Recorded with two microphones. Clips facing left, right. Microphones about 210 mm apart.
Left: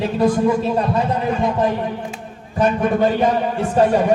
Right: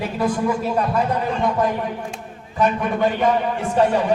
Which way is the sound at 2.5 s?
40° left (ahead or behind).